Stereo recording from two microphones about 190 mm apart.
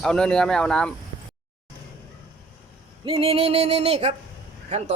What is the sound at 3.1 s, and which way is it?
Music, 30° right (ahead or behind).